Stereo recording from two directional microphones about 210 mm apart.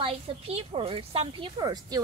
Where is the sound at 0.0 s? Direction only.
25° right (ahead or behind).